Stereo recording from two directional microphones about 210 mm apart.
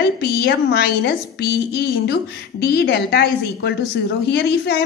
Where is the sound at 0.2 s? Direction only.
50° left (ahead or behind).